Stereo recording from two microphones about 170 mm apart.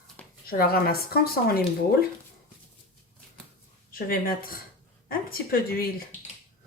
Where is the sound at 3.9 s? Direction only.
60° left (ahead or behind).